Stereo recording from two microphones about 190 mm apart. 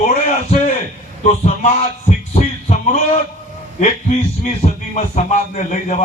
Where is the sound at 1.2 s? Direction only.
40° left (ahead or behind).